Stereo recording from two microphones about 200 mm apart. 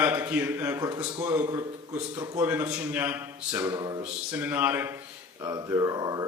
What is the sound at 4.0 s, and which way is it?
A man's voice, 10° right (ahead or behind).